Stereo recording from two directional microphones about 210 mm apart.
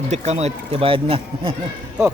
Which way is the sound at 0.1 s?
30° right (ahead or behind).